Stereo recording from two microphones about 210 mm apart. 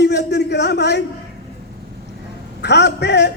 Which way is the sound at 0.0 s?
55° left (ahead or behind).